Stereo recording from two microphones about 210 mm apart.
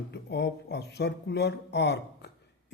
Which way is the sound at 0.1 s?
55° left (ahead or behind).